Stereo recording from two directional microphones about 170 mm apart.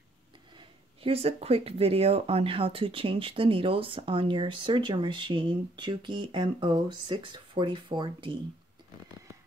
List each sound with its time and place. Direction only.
0.6 s speech: 35° right (ahead or behind)